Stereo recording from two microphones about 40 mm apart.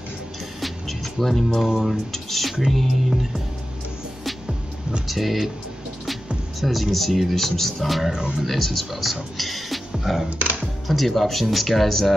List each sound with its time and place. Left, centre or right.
0.6 s music: centre
1.8 s speech: centre
4.2 s music: centre
5.0 s speech: centre
6.6 s speech: centre
8.1 s speech: centre
8.5 s speech: centre